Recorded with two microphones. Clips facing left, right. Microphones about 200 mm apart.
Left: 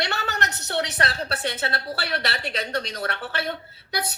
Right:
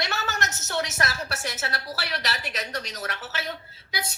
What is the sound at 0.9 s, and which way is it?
Speech, 30° left (ahead or behind).